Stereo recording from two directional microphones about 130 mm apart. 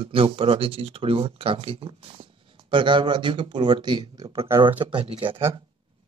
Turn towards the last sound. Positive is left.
turn(degrees=-45)  # may be behind; listen again after turning